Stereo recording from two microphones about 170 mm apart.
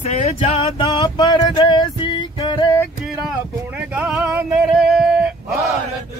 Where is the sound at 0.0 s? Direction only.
40° left (ahead or behind); by 2.7 s 25° left (ahead or behind).